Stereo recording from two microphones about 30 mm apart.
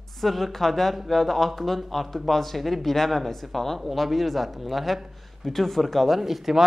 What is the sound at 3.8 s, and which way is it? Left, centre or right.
A man's voice, centre.